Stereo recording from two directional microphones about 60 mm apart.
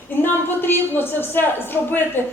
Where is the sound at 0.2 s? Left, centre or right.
Left.